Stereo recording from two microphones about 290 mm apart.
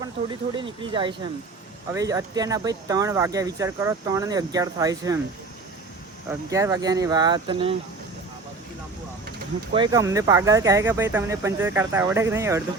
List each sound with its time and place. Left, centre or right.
0.0 s speech: centre
6.5 s speech: centre
9.7 s speech: centre